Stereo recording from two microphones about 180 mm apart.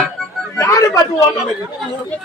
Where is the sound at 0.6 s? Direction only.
15° left (ahead or behind).